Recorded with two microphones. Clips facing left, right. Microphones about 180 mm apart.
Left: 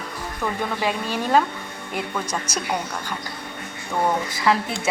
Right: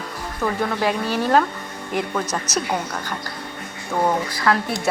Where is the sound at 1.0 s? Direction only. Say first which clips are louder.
Right 4 dB; 10° right (ahead or behind).